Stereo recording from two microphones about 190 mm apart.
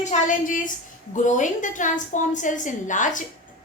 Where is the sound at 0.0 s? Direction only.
40° left (ahead or behind).